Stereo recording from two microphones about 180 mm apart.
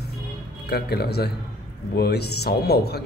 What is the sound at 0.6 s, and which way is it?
Speech, 60° left (ahead or behind).